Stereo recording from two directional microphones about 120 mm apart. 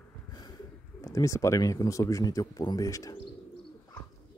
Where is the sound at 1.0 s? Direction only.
25° left (ahead or behind).